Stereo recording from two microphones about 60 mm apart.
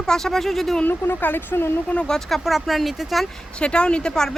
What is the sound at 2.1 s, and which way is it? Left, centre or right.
Speech, centre.